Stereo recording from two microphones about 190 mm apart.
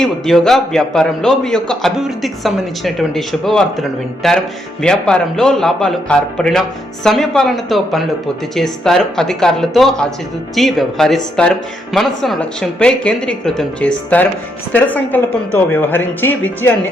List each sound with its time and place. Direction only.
0.0 s a man's voice: centre (ahead or behind)